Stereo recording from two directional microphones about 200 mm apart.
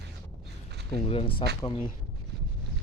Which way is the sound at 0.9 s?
30° left (ahead or behind).